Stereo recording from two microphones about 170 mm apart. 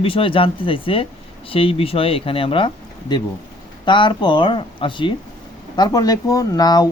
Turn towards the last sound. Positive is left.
turn(degrees=20)  # may be behind; listen again after turning